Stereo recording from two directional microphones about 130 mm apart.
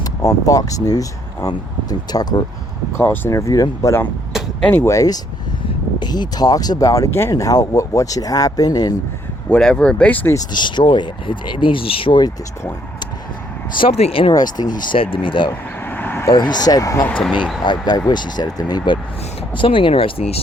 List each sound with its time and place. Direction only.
0.0 s speech: 30° left (ahead or behind)
3.0 s speech: 20° left (ahead or behind)
4.6 s speech: 15° left (ahead or behind)
9.5 s speech: 5° left (ahead or behind)
10.3 s speech: 35° left (ahead or behind)
13.7 s speech: 50° left (ahead or behind)
14.3 s speech: 30° left (ahead or behind)
15.9 s vehicle: 15° left (ahead or behind)
16.4 s speech: 30° left (ahead or behind); by 20.4 s 50° left (ahead or behind)